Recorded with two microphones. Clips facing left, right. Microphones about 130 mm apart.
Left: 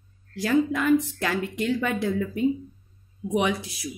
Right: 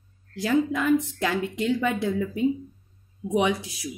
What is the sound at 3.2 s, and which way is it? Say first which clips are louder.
Speech: even; centre (ahead or behind).